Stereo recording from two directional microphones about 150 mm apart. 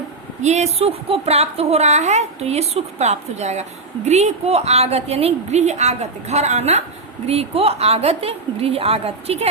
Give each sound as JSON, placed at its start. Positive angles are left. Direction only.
{"t": 0.4, "sound": "a woman's voice", "side_deg": -45}